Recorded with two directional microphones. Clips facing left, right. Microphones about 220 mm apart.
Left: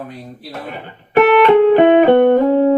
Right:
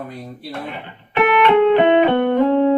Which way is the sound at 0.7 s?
40° left (ahead or behind).